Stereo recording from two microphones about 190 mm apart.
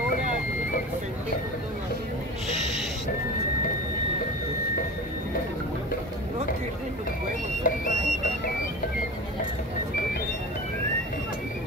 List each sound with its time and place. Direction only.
7.7 s music: 45° left (ahead or behind)